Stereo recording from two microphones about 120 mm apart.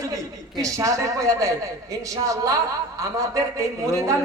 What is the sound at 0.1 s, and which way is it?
A man's voice, 30° right (ahead or behind).